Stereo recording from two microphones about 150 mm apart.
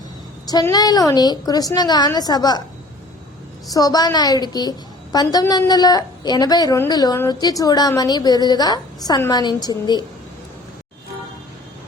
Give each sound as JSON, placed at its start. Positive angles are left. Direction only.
{"t": 0.7, "sound": "a woman's voice", "side_deg": 25}
{"t": 3.7, "sound": "a woman's voice", "side_deg": 25}